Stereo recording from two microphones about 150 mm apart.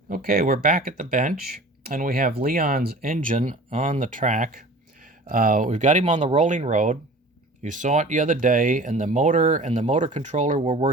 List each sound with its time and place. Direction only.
0.1 s speech: 75° right (ahead or behind); by 10.8 s 50° right (ahead or behind)